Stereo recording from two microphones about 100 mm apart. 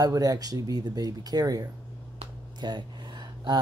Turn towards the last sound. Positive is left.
turn(degrees=-50)  # may be behind; listen again after turning